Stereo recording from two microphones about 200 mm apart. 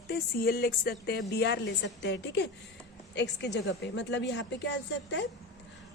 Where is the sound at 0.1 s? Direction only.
50° left (ahead or behind).